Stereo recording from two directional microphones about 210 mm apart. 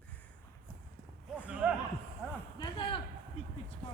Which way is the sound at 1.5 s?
5° right (ahead or behind).